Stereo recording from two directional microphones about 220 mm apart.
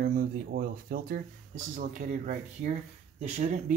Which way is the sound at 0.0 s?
40° right (ahead or behind).